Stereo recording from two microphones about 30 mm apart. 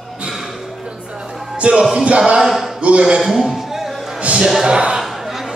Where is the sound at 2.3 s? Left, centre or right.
Centre.